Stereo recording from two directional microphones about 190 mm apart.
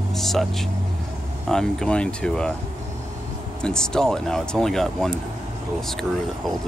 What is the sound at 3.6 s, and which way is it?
Speech, 5° left (ahead or behind).